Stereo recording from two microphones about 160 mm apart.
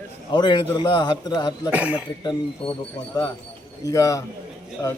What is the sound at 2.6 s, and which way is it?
Speech, 30° left (ahead or behind).